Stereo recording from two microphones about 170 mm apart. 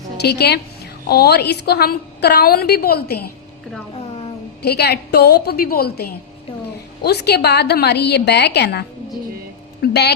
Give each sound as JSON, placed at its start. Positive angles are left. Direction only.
{"t": 0.2, "sound": "a woman's voice", "side_deg": 75}
{"t": 3.9, "sound": "a sound", "side_deg": 35}
{"t": 4.6, "sound": "a woman's voice", "side_deg": 70}
{"t": 7.0, "sound": "a woman's voice", "side_deg": 75}